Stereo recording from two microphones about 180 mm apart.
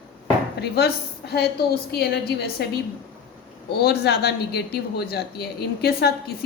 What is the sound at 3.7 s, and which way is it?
A woman's voice, 65° left (ahead or behind).